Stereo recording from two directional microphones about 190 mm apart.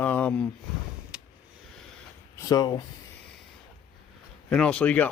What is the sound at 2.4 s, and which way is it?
Speech, 20° left (ahead or behind).